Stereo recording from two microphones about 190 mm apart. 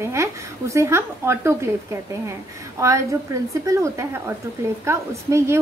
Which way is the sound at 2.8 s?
15° right (ahead or behind).